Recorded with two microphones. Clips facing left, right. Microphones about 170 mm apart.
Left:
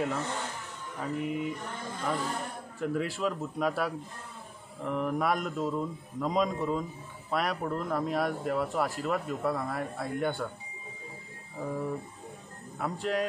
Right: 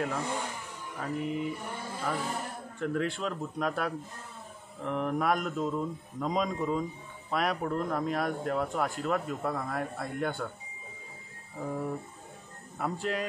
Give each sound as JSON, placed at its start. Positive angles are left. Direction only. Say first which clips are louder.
{"t": 0.1, "sound": "mantra", "louder": "even", "side_deg": -10}
{"t": 1.5, "sound": "mantra", "louder": "even", "side_deg": -10}
{"t": 2.8, "sound": "a man's voice", "louder": "left 1 dB", "side_deg": 5}
{"t": 11.5, "sound": "a man's voice", "louder": "left 1 dB", "side_deg": 0}